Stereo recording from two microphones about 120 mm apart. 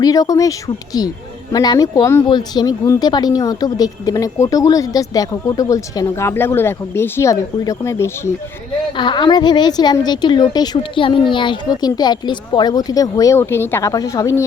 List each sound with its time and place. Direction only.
0.0 s speech: 30° left (ahead or behind)
1.5 s a woman's voice: 30° left (ahead or behind)
9.0 s a woman's voice: 40° left (ahead or behind)